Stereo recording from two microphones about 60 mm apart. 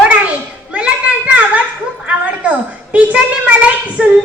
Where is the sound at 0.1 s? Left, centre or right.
Right.